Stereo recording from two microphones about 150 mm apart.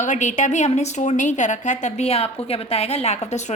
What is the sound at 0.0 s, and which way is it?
A woman's voice, 55° left (ahead or behind).